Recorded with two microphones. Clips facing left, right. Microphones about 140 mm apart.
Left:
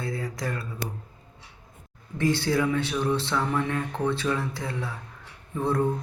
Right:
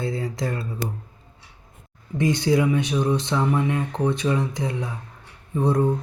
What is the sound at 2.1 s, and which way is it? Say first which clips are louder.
Speech: right 4 dB; 15° right (ahead or behind).